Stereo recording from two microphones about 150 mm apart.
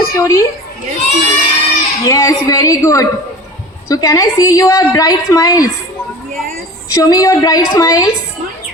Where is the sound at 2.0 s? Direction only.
20° left (ahead or behind).